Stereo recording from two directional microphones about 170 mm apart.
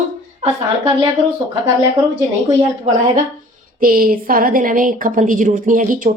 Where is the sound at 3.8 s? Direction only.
55° right (ahead or behind).